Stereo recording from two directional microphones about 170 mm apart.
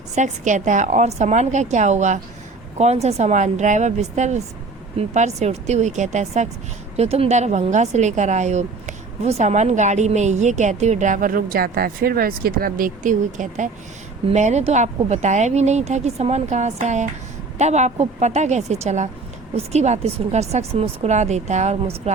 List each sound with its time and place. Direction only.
0.2 s a woman's voice: 45° right (ahead or behind)